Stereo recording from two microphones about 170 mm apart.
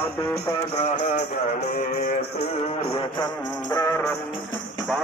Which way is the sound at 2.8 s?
30° left (ahead or behind).